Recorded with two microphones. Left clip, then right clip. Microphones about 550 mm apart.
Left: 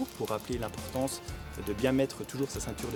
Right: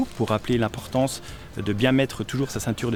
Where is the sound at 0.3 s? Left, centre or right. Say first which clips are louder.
Right 12 dB; right.